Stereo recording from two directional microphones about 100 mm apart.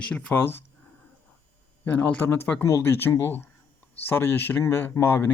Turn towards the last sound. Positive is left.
turn(degrees=25)  # may be behind; listen again after turning